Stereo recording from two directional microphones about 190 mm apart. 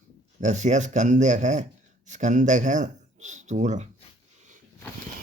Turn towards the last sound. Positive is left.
turn(degrees=-40)  # may be behind; listen again after turning